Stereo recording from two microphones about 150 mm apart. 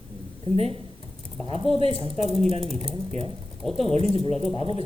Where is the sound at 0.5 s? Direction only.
45° right (ahead or behind).